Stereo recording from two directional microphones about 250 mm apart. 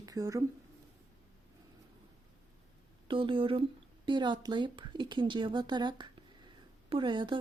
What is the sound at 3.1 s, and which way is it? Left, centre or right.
Speech, centre.